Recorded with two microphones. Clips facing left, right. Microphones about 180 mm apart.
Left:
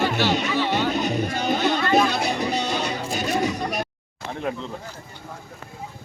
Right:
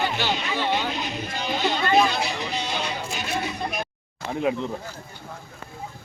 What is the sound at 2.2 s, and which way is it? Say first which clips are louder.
Music: left 4 dB; 45° left (ahead or behind).